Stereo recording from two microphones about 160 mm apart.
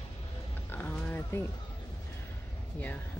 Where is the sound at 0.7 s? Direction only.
10° left (ahead or behind).